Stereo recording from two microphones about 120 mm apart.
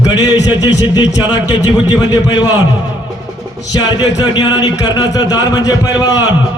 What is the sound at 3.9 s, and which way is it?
A man's voice, 35° left (ahead or behind).